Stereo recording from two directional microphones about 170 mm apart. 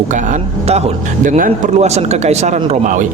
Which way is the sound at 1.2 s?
45° right (ahead or behind).